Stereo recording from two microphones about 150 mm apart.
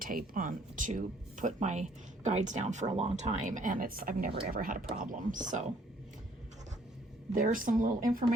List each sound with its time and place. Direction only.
0.0 s speech: 70° right (ahead or behind)
4.9 s speech: 60° right (ahead or behind)
7.3 s speech: 65° right (ahead or behind)